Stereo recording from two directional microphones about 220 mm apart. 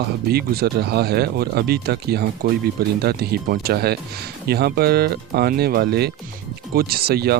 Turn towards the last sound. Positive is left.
turn(degrees=-45)  # may be behind; listen again after turning